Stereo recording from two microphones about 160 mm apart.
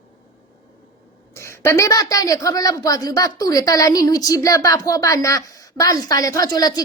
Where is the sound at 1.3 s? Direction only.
15° left (ahead or behind).